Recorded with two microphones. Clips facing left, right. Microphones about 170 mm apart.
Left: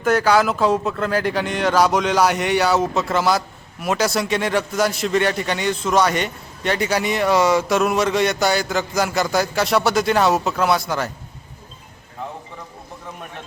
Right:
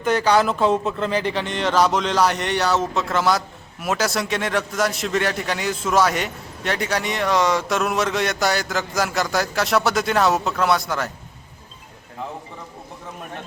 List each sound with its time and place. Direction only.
0.0 s speech: 5° left (ahead or behind)